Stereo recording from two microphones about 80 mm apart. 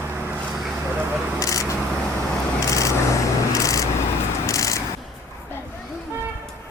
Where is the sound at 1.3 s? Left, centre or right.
Left.